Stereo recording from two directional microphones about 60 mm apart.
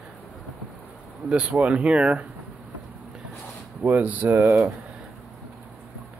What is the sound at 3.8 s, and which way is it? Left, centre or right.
Speech, right.